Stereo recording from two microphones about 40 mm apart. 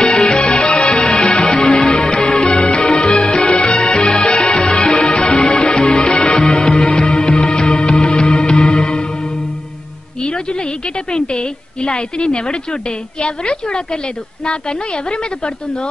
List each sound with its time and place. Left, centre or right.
0.3 s music: left
3.3 s music: left
5.8 s music: centre
6.0 s music: left
11.1 s a woman's voice: left